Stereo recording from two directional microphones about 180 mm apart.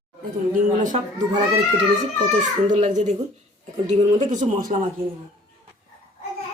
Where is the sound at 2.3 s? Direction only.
40° right (ahead or behind).